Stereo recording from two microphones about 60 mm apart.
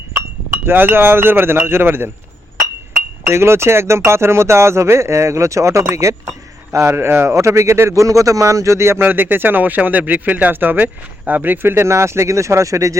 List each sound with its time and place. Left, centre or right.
0.6 s speech: right
3.2 s speech: right
6.7 s a man's voice: right
9.0 s speech: right